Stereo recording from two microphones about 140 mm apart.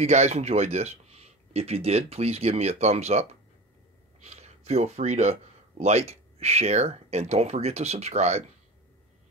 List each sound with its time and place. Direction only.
0.0 s speech: 50° right (ahead or behind)